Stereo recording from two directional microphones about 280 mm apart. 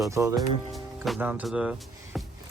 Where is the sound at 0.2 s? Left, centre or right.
Centre.